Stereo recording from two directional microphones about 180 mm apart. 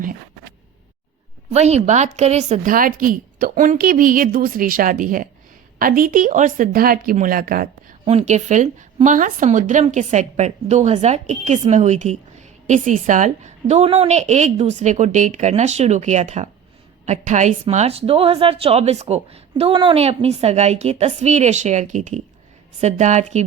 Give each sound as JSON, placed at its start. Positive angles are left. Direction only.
{"t": 1.5, "sound": "a woman's voice", "side_deg": -35}
{"t": 8.0, "sound": "a woman's voice", "side_deg": -35}